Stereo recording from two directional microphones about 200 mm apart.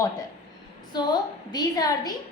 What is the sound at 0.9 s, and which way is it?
A woman's voice, 20° left (ahead or behind).